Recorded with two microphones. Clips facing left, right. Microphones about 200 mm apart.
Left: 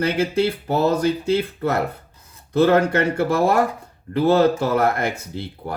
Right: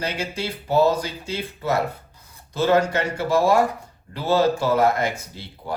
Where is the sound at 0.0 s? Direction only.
55° left (ahead or behind).